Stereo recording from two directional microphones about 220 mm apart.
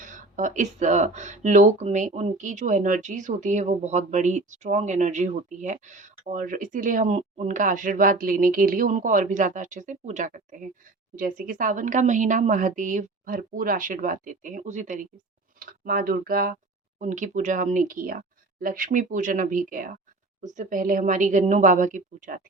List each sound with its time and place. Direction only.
0.0 s speech: 35° right (ahead or behind)